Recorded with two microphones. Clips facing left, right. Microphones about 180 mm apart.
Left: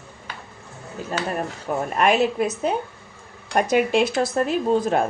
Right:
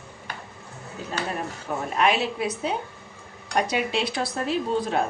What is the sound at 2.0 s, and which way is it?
Speech, 45° left (ahead or behind).